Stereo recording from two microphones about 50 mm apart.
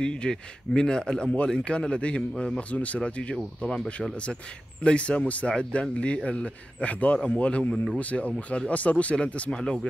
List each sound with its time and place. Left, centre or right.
0.0 s speech: centre
4.8 s speech: left